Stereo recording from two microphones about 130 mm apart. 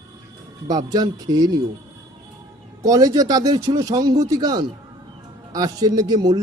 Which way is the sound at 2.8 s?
25° right (ahead or behind).